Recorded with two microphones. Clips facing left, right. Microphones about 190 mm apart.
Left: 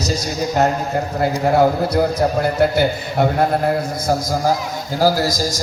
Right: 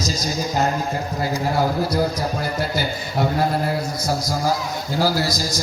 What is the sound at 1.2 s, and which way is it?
A man's voice, 60° left (ahead or behind).